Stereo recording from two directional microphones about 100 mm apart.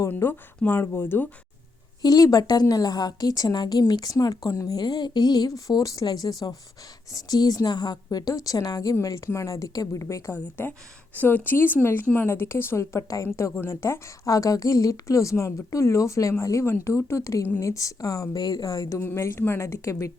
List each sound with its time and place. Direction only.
0.1 s speech: 20° left (ahead or behind)
2.0 s a woman's voice: 40° left (ahead or behind)
10.3 s a woman's voice: 20° left (ahead or behind)